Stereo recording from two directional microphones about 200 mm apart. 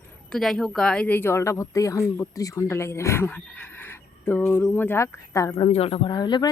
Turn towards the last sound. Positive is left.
turn(degrees=20)  # may be behind; listen again after turning